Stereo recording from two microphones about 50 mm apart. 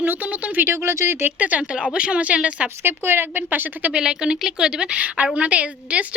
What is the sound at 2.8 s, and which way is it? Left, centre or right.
Speech, right.